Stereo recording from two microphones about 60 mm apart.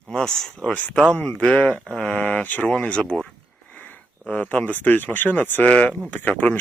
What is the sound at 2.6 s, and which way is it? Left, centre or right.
Speech, centre.